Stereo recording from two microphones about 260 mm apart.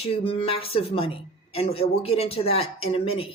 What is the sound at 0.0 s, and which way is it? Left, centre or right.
Speech, left.